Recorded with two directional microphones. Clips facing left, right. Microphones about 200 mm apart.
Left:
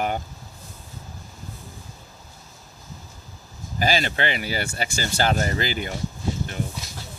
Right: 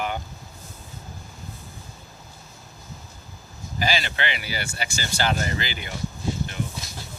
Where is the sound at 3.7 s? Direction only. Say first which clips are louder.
Left 3 dB; 45° left (ahead or behind).